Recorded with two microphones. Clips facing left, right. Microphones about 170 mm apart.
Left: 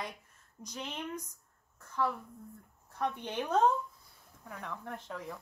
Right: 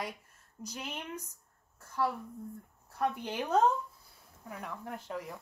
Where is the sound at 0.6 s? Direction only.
10° right (ahead or behind).